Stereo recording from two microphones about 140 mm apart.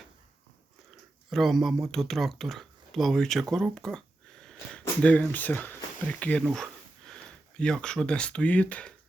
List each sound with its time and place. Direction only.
0.9 s speech: centre (ahead or behind)